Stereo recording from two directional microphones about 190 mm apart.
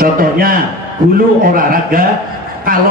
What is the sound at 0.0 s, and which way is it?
A man's voice, 50° right (ahead or behind).